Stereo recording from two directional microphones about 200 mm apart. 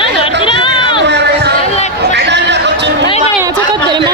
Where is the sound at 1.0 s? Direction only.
60° right (ahead or behind).